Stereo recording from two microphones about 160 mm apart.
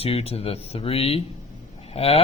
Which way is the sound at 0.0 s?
40° left (ahead or behind).